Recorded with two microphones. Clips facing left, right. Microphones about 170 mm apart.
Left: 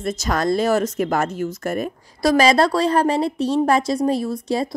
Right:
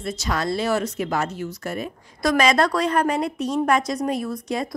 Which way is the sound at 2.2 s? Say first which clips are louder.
Left 3 dB; 35° left (ahead or behind).